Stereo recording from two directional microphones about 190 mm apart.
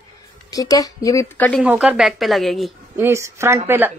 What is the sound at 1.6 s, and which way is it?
A woman's voice, 5° right (ahead or behind).